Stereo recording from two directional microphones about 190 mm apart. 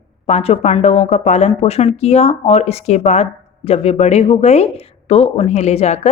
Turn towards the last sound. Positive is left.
turn(degrees=35)  # may be behind; listen again after turning